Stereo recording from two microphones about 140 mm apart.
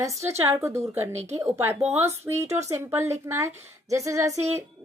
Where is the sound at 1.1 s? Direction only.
50° right (ahead or behind).